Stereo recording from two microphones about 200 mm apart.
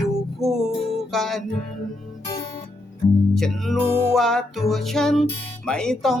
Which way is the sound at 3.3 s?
Centre (ahead or behind).